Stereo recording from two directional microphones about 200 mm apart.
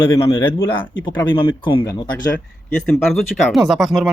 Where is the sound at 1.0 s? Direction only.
25° left (ahead or behind).